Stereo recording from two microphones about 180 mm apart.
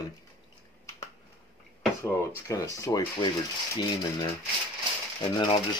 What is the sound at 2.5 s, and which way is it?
Speech, 20° left (ahead or behind).